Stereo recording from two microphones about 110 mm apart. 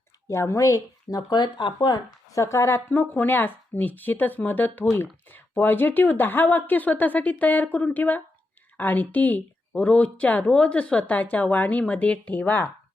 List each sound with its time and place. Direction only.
0.3 s speech: 25° left (ahead or behind)
2.4 s speech: 25° left (ahead or behind)